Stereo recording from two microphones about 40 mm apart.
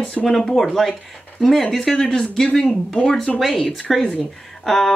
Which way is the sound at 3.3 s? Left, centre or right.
Centre.